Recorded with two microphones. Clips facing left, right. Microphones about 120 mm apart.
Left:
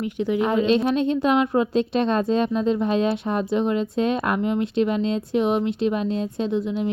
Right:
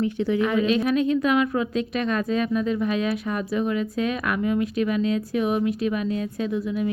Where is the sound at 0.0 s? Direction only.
15° left (ahead or behind).